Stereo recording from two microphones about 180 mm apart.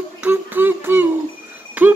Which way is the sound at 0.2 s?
10° right (ahead or behind).